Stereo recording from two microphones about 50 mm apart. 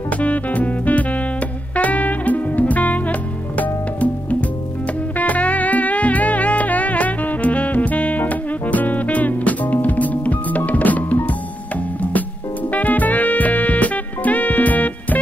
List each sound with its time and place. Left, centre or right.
0.2 s music: left
12.7 s music: left